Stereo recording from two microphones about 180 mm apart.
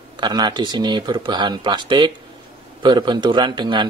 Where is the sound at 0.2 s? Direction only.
25° right (ahead or behind).